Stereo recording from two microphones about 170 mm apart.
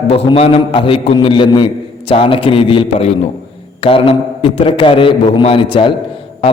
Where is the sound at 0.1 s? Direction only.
35° left (ahead or behind).